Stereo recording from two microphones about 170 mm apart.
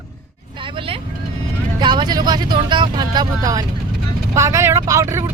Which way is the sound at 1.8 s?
25° right (ahead or behind).